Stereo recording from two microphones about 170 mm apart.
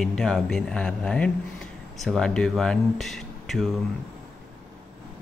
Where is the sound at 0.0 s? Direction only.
Centre (ahead or behind).